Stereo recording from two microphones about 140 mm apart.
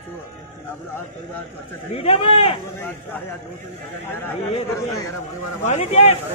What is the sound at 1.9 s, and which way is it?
Speech, 40° left (ahead or behind).